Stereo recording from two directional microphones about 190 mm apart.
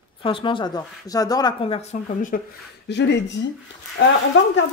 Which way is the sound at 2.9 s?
65° left (ahead or behind).